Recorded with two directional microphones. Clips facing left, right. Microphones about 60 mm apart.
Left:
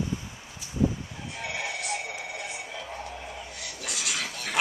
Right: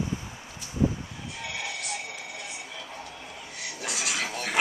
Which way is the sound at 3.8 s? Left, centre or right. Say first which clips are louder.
Right 2 dB; right.